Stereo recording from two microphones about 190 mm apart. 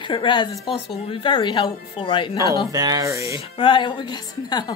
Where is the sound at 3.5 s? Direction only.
25° left (ahead or behind).